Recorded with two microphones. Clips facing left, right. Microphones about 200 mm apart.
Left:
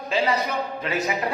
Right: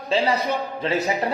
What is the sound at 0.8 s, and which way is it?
Speech, 35° right (ahead or behind).